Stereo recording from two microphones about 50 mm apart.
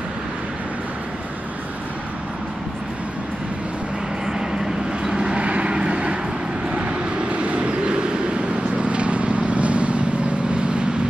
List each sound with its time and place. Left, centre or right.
4.3 s vehicle: centre